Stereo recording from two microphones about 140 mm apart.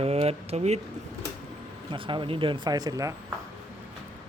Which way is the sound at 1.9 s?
35° right (ahead or behind).